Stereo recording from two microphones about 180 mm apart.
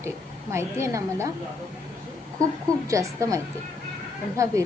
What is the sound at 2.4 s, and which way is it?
Speech, 20° right (ahead or behind).